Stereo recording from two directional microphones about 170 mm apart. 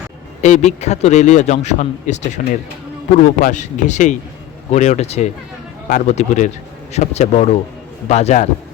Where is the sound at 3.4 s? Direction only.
45° left (ahead or behind).